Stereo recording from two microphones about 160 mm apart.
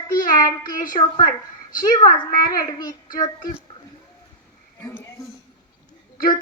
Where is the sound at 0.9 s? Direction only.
40° left (ahead or behind).